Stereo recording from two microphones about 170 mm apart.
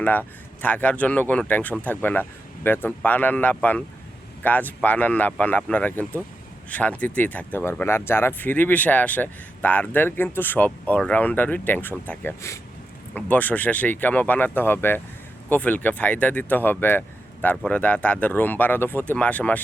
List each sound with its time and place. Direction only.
0.0 s speech: 10° left (ahead or behind)